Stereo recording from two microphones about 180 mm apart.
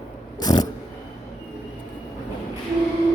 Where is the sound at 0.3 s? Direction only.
20° left (ahead or behind).